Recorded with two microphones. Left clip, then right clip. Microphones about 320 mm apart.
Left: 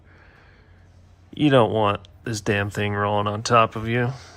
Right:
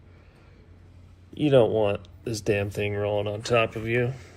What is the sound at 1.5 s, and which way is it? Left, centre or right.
Speech, left.